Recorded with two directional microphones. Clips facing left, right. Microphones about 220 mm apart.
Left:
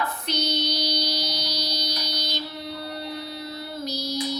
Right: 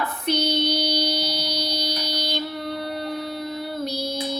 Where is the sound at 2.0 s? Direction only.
55° right (ahead or behind).